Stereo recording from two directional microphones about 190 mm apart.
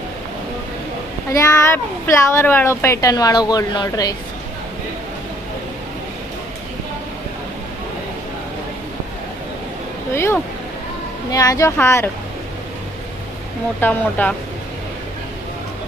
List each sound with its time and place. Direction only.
1.3 s speech: 15° left (ahead or behind)
10.1 s speech: 15° left (ahead or behind)
13.8 s speech: 10° left (ahead or behind)